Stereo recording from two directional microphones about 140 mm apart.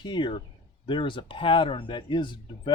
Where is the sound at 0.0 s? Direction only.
35° left (ahead or behind).